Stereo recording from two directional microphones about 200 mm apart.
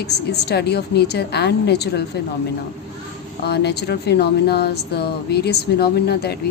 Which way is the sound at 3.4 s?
55° left (ahead or behind).